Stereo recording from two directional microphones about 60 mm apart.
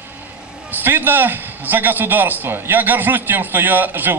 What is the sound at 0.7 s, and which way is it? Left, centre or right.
A man's voice, right.